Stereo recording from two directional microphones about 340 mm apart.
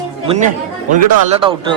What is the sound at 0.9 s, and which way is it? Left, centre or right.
Speech, centre.